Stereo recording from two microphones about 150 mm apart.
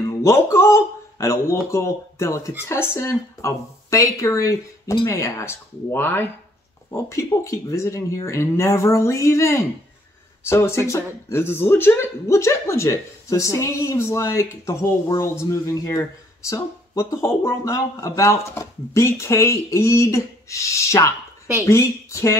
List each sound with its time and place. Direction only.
0.2 s a man's voice: 15° left (ahead or behind)